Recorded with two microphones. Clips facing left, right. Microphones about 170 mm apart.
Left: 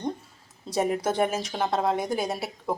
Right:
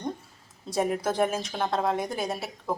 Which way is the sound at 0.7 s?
5° left (ahead or behind).